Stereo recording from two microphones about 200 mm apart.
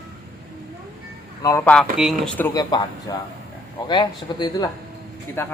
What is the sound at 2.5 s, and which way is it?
Speech, 20° left (ahead or behind).